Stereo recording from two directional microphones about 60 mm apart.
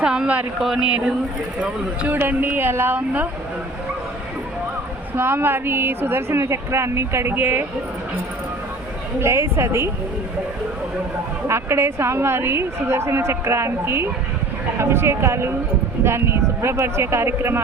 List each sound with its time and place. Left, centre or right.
0.0 s speech: centre
0.6 s speech: centre
2.1 s speech: right
5.1 s a woman's voice: right
7.3 s speech: right
9.2 s a woman's voice: right
11.4 s a woman's voice: right